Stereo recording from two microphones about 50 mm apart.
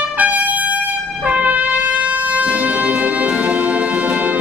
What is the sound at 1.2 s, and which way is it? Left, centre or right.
Brass instrument, right.